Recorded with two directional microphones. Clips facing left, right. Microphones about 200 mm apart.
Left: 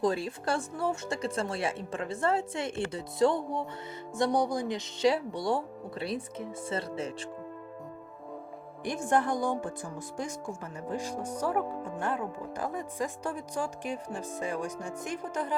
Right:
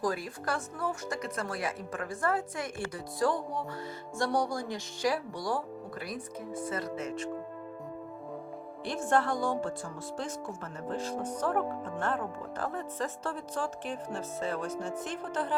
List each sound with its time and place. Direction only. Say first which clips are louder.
0.0 s speech: left 4 dB; 25° left (ahead or behind)
8.8 s speech: left 1 dB; 15° left (ahead or behind)
10.8 s speech: even; 15° left (ahead or behind)